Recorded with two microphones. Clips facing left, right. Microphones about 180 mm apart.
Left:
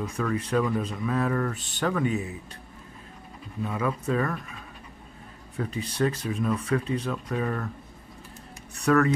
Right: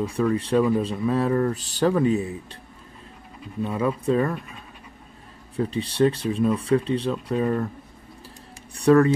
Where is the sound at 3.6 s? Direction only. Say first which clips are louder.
Right 5 dB; 30° right (ahead or behind).